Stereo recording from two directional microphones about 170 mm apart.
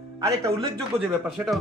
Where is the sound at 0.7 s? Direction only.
Centre (ahead or behind).